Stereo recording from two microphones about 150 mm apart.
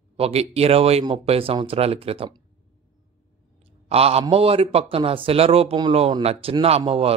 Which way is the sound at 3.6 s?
40° right (ahead or behind).